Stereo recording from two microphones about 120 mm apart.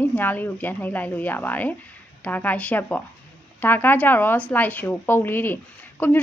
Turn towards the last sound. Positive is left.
turn(degrees=15)  # may be behind; listen again after turning